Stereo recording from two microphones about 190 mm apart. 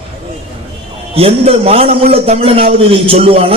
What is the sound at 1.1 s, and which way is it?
A man's voice, 30° right (ahead or behind).